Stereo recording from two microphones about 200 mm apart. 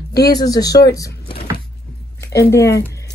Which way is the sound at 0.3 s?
20° left (ahead or behind).